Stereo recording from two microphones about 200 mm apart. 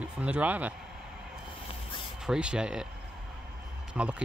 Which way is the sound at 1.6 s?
25° left (ahead or behind).